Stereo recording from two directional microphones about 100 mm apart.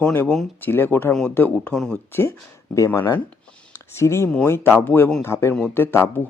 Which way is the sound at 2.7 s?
30° left (ahead or behind).